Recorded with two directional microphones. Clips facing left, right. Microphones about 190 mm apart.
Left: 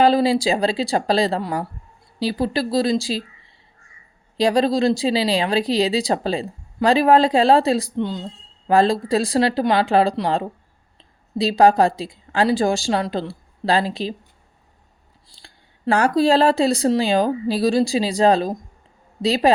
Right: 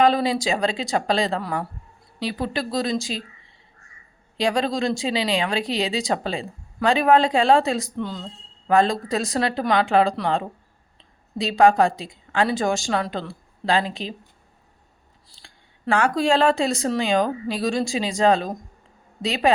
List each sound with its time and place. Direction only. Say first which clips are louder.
0.0 s speech: left 3 dB; 30° left (ahead or behind)
4.4 s speech: left 5 dB; 35° left (ahead or behind)
11.3 s speech: left 2 dB; 35° left (ahead or behind)
15.4 s speech: left 3 dB; 40° left (ahead or behind)